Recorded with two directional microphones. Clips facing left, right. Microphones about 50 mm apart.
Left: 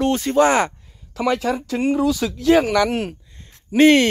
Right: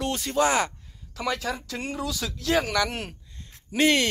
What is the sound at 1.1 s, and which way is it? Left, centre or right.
Speech, left.